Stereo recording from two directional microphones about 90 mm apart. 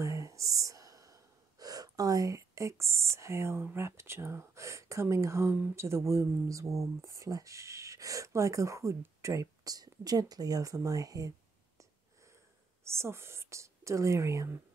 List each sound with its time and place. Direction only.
0.0 s a sound: 35° right (ahead or behind)
3.7 s speech: 30° right (ahead or behind)
12.8 s speech: 30° right (ahead or behind)